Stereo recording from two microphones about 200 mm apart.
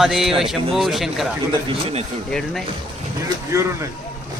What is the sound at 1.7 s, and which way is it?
Speech, 30° right (ahead or behind).